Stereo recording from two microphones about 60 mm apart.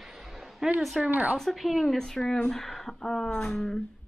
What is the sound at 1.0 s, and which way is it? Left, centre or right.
Speech, right.